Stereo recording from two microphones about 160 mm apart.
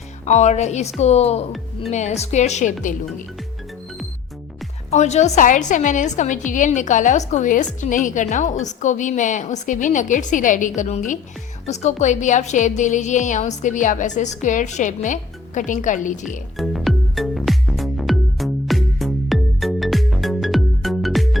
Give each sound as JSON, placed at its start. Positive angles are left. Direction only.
{"t": 0.3, "sound": "a woman's voice", "side_deg": 45}
{"t": 4.9, "sound": "a woman's voice", "side_deg": 45}
{"t": 16.6, "sound": "music", "side_deg": 0}